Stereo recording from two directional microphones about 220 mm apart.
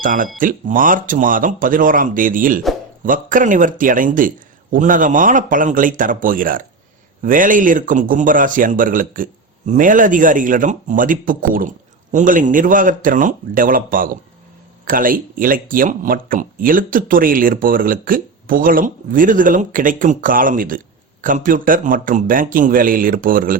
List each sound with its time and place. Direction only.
0.0 s speech: 40° right (ahead or behind)